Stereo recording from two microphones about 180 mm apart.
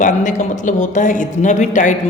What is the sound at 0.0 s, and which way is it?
Speech, 45° left (ahead or behind).